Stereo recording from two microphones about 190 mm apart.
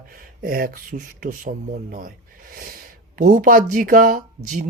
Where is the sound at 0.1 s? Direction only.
50° right (ahead or behind).